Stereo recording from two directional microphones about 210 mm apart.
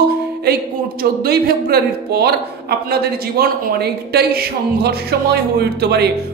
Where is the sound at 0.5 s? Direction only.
45° right (ahead or behind).